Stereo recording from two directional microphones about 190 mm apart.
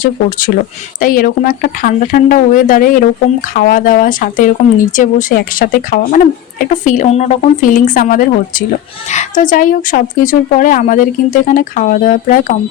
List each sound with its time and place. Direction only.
0.0 s a woman's voice: 45° left (ahead or behind)